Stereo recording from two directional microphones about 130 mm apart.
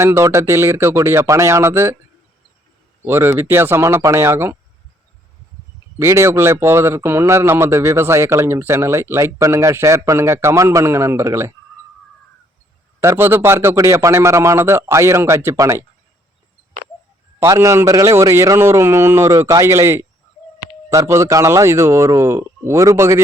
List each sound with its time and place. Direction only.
0.0 s speech: 20° right (ahead or behind)
3.0 s speech: 20° right (ahead or behind)
6.0 s speech: 20° right (ahead or behind)
13.0 s speech: 20° right (ahead or behind)
17.4 s speech: 20° right (ahead or behind)